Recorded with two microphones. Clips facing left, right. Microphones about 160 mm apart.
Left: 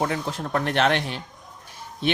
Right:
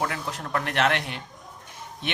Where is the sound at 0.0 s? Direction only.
30° left (ahead or behind).